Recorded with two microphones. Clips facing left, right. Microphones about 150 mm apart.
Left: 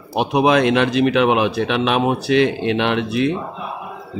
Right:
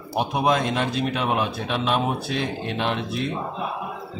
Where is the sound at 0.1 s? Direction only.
80° left.